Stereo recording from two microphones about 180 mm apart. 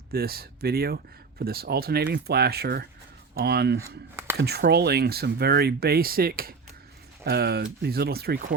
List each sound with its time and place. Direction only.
0.1 s speech: 60° right (ahead or behind)
3.8 s speech: 15° right (ahead or behind)
4.4 s speech: 65° right (ahead or behind)